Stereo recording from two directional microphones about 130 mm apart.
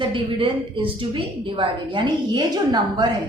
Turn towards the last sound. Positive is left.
turn(degrees=-35)  # may be behind; listen again after turning